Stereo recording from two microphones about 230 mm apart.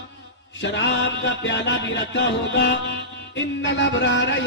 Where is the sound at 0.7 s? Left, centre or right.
Left.